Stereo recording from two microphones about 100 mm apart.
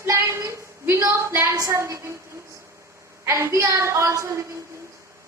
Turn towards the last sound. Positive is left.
turn(degrees=-30)  # may be behind; listen again after turning